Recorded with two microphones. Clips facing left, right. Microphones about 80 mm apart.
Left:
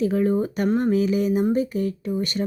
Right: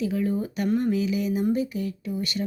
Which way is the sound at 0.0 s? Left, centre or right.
Left.